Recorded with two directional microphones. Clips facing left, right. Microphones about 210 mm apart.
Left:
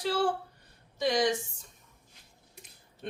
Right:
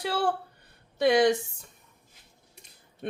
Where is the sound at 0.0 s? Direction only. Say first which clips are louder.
Even; 60° right (ahead or behind).